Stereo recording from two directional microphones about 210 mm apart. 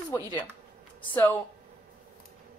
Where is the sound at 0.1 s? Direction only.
15° left (ahead or behind).